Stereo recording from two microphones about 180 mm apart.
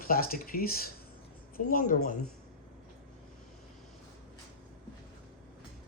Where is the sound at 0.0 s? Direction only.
55° left (ahead or behind).